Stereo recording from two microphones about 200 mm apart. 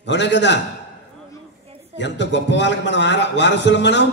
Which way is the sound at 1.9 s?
60° left (ahead or behind).